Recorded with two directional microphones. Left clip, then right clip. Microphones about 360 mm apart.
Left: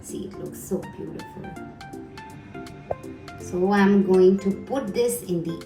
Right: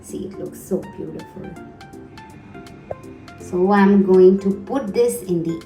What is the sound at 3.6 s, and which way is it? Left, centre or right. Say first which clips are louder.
Speech: right 5 dB; centre.